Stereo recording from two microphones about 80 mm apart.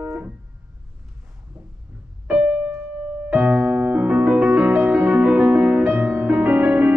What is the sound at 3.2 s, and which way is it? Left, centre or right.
Music, right.